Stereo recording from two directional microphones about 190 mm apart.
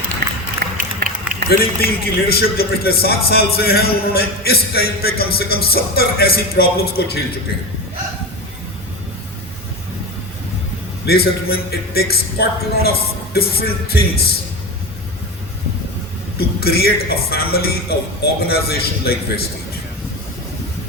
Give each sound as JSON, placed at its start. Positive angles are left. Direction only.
{"t": 0.2, "sound": "run", "side_deg": -60}
{"t": 1.5, "sound": "a man's voice", "side_deg": 55}
{"t": 11.0, "sound": "a man's voice", "side_deg": 55}
{"t": 16.4, "sound": "a man's voice", "side_deg": 55}